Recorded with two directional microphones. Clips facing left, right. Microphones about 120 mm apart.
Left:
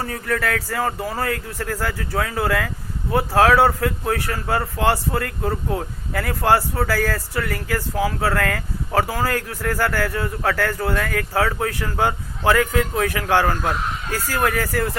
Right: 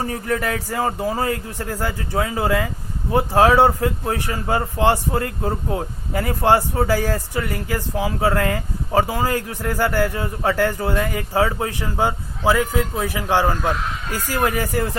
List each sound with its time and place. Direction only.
0.0 s a man's voice: 25° right (ahead or behind)